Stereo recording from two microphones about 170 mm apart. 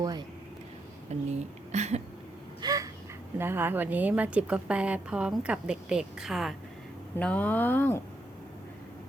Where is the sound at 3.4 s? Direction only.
15° right (ahead or behind).